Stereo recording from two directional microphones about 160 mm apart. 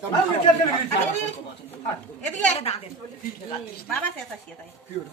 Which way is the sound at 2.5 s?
40° left (ahead or behind).